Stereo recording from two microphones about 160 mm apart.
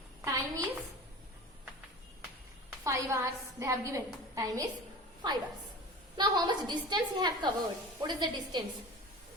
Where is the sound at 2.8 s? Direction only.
20° right (ahead or behind).